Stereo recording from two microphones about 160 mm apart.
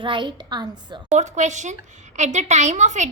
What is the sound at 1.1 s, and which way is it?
A woman's voice, 50° right (ahead or behind).